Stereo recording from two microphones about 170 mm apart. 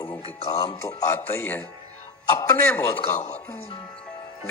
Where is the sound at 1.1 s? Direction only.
15° left (ahead or behind).